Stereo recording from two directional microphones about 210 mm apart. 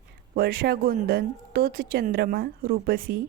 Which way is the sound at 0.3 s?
45° right (ahead or behind).